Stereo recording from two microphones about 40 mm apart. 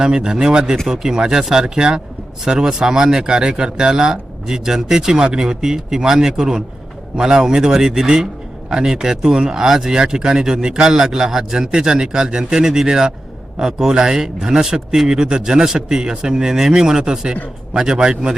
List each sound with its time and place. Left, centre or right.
0.0 s a man's voice: centre